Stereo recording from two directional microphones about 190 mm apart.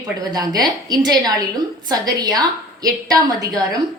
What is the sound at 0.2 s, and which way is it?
A woman's voice, 20° right (ahead or behind).